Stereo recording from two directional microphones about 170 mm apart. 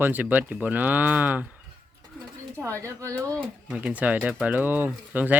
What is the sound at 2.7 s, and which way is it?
Speech, 15° right (ahead or behind).